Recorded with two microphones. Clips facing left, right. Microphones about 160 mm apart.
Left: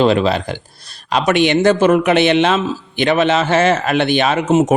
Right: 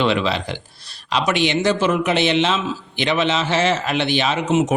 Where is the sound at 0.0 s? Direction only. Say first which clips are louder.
Left 6 dB; 40° left (ahead or behind).